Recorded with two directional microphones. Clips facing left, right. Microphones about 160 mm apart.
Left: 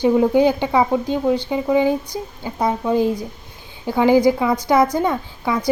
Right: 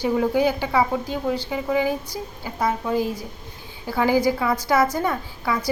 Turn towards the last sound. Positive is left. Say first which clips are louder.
# left 4 dB
turn(degrees=20)  # may be behind; listen again after turning